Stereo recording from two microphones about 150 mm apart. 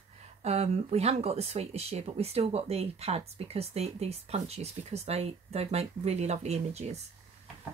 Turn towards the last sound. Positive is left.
turn(degrees=-45)  # may be behind; listen again after turning